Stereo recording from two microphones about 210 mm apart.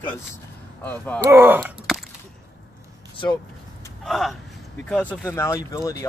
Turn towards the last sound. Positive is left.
turn(degrees=15)  # may be behind; listen again after turning